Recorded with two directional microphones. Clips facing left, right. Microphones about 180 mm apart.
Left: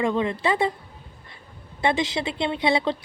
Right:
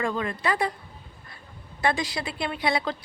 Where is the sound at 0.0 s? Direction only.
25° left (ahead or behind).